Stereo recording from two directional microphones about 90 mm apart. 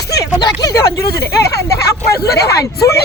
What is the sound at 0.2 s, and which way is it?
Speech, 45° left (ahead or behind).